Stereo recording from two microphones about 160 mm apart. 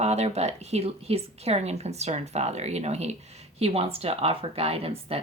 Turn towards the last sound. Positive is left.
turn(degrees=-40)  # may be behind; listen again after turning